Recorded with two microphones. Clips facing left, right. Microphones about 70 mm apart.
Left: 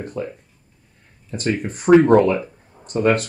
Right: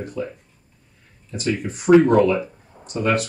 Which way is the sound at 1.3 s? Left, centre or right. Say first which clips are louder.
Left 1 dB; left.